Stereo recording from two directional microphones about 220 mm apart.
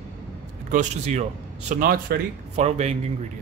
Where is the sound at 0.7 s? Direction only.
30° right (ahead or behind).